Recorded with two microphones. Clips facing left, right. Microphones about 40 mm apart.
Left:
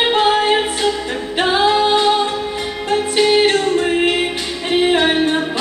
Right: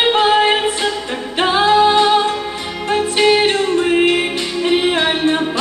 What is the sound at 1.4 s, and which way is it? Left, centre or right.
Singing, centre.